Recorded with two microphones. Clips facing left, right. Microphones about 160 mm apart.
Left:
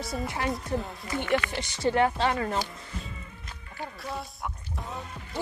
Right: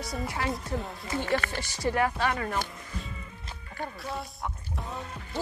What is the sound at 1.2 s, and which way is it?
Speech, 35° right (ahead or behind).